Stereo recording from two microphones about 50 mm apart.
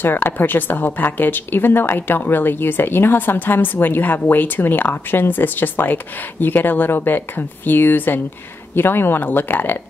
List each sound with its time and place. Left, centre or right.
0.0 s a woman's voice: left